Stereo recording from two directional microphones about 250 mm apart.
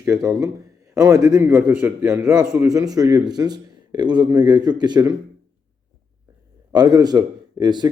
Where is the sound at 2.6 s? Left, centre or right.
Centre.